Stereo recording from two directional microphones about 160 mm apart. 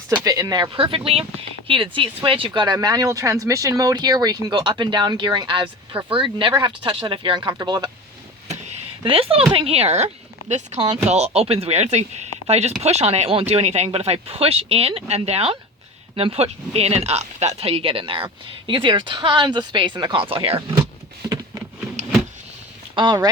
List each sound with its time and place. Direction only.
0.1 s speech: 20° right (ahead or behind)
8.4 s a sound: 45° right (ahead or behind)
9.5 s speech: 35° right (ahead or behind)
23.0 s speech: 25° right (ahead or behind)